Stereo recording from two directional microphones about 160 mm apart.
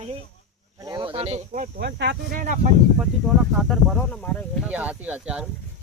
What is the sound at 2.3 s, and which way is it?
Speech, 50° right (ahead or behind).